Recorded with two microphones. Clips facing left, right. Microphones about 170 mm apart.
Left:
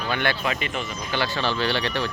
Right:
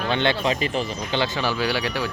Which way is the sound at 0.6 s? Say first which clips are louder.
Right 5 dB; 35° right (ahead or behind).